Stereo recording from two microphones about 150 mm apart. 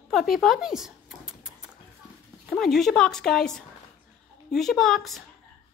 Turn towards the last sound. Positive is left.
turn(degrees=0)  # may be behind; listen again after turning